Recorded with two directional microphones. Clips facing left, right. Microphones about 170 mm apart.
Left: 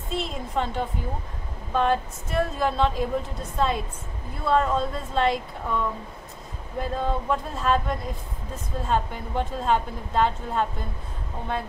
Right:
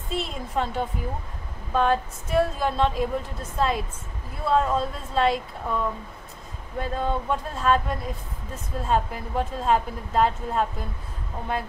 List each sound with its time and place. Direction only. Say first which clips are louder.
0.1 s a woman's voice: even; centre (ahead or behind)